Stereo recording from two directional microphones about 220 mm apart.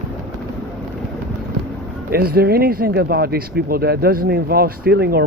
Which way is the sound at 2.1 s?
45° right (ahead or behind).